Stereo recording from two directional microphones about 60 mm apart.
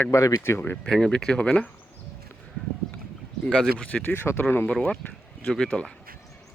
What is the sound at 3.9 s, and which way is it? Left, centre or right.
Speech, left.